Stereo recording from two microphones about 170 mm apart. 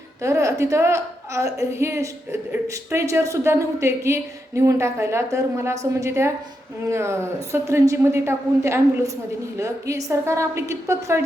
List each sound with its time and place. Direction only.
0.2 s a woman's voice: 20° right (ahead or behind)